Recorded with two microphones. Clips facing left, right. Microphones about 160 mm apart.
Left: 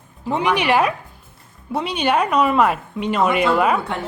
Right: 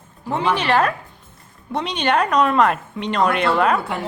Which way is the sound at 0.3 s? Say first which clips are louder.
Left 1 dB; 15° left (ahead or behind).